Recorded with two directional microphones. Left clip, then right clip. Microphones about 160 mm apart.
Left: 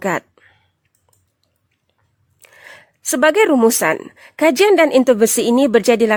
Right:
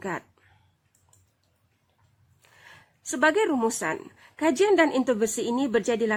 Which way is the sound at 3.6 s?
70° left (ahead or behind).